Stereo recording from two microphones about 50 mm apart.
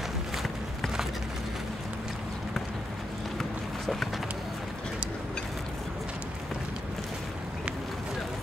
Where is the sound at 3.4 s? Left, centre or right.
Centre.